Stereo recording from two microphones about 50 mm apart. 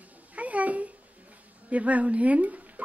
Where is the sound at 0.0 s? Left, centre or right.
Right.